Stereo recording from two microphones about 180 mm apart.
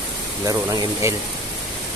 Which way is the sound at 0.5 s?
20° right (ahead or behind).